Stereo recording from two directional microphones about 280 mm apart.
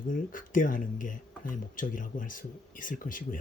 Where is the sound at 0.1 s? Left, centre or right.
Left.